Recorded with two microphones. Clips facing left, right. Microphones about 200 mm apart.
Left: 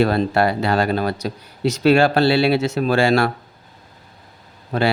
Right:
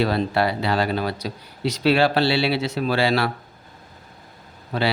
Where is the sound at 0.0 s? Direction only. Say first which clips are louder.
Left 4 dB; 50° left (ahead or behind).